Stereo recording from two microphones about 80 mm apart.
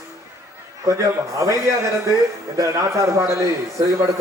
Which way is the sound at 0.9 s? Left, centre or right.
Right.